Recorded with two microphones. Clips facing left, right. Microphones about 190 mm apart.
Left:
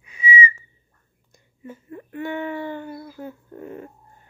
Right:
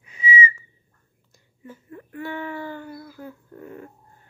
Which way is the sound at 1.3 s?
20° left (ahead or behind).